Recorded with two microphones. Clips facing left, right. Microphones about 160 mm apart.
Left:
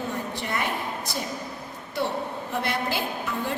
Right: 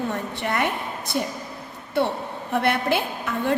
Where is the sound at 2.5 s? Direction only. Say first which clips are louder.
Right 6 dB; 60° right (ahead or behind).